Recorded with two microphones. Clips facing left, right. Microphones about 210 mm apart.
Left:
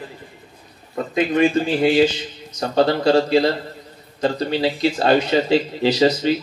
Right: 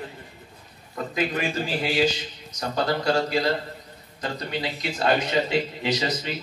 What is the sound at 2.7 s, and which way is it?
A man's voice, 30° left (ahead or behind).